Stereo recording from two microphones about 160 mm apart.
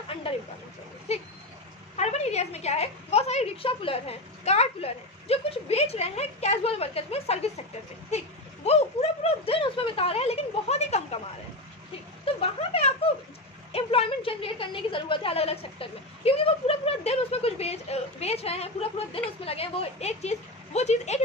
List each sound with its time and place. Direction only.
1.1 s a woman's voice: 40° left (ahead or behind)
8.6 s a woman's voice: 40° left (ahead or behind)
12.3 s a woman's voice: 35° left (ahead or behind)
13.7 s a woman's voice: 40° left (ahead or behind)